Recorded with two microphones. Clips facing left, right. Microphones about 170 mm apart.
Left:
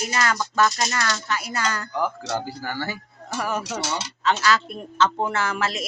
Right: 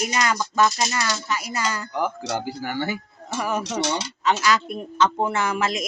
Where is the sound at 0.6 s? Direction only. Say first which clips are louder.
Right 1 dB; 5° right (ahead or behind).